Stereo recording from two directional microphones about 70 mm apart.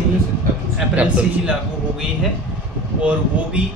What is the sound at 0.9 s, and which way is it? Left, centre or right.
Speech, centre.